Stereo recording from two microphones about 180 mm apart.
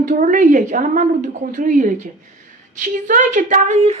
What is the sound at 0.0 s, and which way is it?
A woman's voice, 45° right (ahead or behind).